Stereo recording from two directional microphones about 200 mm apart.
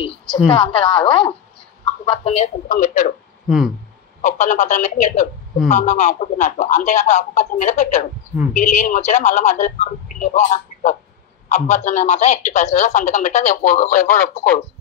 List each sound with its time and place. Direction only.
0.5 s a woman's voice: 25° left (ahead or behind); by 3.1 s 40° left (ahead or behind)
3.4 s speech: centre (ahead or behind)
4.2 s speech: 40° left (ahead or behind)